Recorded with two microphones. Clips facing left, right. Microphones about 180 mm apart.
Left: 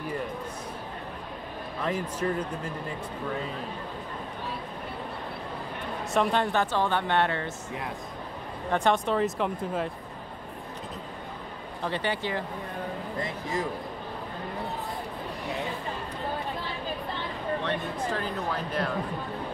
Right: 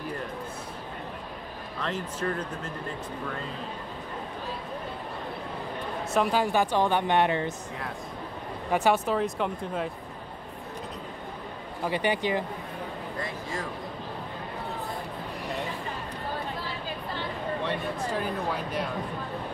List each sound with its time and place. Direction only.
1.8 s speech: 10° left (ahead or behind)
6.1 s speech: 5° right (ahead or behind)
8.7 s speech: 5° right (ahead or behind)
11.8 s speech: 15° right (ahead or behind)
13.2 s speech: 20° left (ahead or behind)
17.6 s speech: 10° right (ahead or behind)